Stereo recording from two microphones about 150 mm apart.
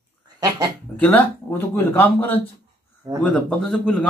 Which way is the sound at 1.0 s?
15° left (ahead or behind).